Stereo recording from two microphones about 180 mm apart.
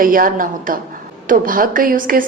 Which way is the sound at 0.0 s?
50° right (ahead or behind).